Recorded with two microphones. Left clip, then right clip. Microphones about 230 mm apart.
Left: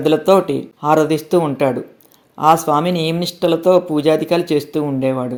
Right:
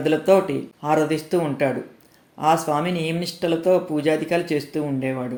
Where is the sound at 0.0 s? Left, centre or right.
Left.